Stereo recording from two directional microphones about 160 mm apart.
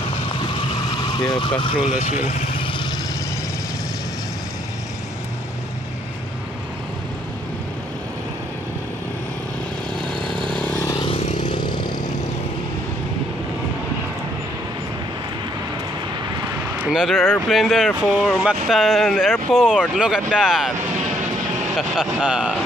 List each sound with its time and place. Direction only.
1.1 s speech: 30° left (ahead or behind)
1.9 s vehicle: 50° left (ahead or behind)
9.9 s vehicle: 30° right (ahead or behind)
10.2 s vehicle: 5° left (ahead or behind)
11.0 s vehicle: 35° left (ahead or behind)
16.7 s vehicle: 5° right (ahead or behind)
17.5 s speech: centre (ahead or behind)
21.7 s speech: 5° right (ahead or behind)